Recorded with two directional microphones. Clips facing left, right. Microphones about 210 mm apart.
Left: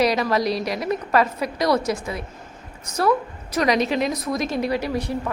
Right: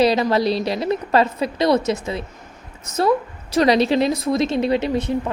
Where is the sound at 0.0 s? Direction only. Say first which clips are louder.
Right 3 dB; 30° right (ahead or behind).